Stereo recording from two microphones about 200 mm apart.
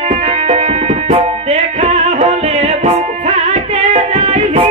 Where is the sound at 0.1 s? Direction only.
35° right (ahead or behind).